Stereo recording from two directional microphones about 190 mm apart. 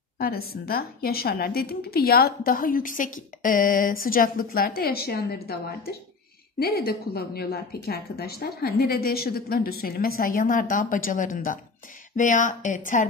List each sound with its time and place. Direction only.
0.2 s a woman's voice: 55° left (ahead or behind)